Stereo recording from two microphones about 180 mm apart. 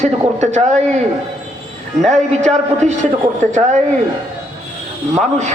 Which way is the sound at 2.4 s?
40° right (ahead or behind).